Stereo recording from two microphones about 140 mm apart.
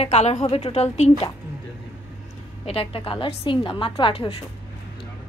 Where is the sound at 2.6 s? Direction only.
45° left (ahead or behind).